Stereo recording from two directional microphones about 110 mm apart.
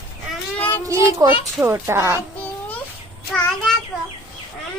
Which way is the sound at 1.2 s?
30° right (ahead or behind).